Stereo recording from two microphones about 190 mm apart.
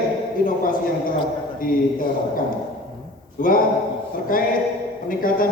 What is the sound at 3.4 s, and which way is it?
Speech, 45° left (ahead or behind).